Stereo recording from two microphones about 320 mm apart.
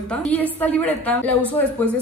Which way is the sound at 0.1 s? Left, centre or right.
Centre.